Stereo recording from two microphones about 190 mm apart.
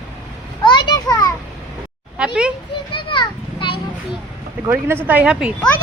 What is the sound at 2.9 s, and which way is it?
Children playing, 25° left (ahead or behind).